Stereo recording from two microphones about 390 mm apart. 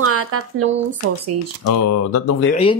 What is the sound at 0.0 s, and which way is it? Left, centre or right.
Speech, right.